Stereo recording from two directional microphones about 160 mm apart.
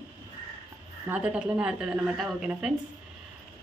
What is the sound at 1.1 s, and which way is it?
Speech, 10° right (ahead or behind).